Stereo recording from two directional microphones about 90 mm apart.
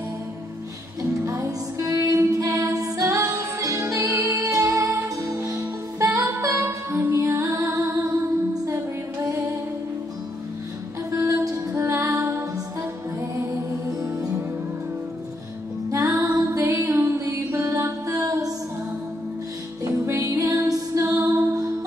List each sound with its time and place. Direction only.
1.2 s music: 35° right (ahead or behind)
11.1 s music: 40° right (ahead or behind)
15.9 s music: 35° right (ahead or behind)
19.8 s music: 40° right (ahead or behind)